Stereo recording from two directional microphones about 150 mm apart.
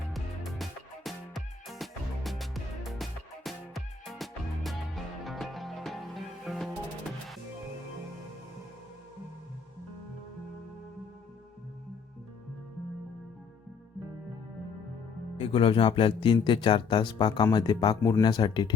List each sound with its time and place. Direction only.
0.1 s music: centre (ahead or behind)
15.4 s speech: 35° left (ahead or behind)